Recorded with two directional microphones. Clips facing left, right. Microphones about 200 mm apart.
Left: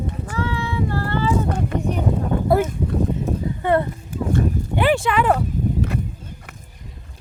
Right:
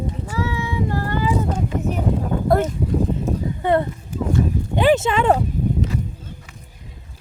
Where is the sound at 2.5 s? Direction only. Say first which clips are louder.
Even; 5° left (ahead or behind).